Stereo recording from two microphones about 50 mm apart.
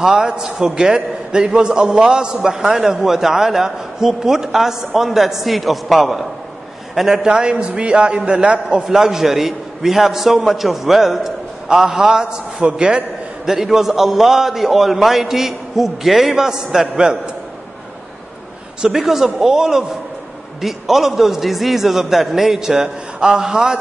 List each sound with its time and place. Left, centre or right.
0.0 s a man's voice: centre
7.0 s a man's voice: centre
13.5 s a man's voice: centre
18.8 s a man's voice: centre